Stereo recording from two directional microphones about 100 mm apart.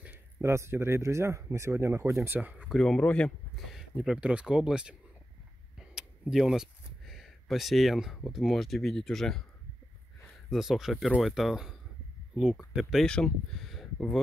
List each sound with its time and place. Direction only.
0.0 s speech: 25° right (ahead or behind)
2.7 s speech: 5° left (ahead or behind)
3.5 s speech: 5° right (ahead or behind)
6.3 s speech: 5° right (ahead or behind)
10.5 s speech: 5° right (ahead or behind)
13.0 s speech: 5° left (ahead or behind)